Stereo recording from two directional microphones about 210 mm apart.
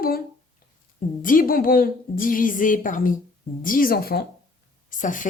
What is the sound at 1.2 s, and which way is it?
A woman's voice, 40° left (ahead or behind).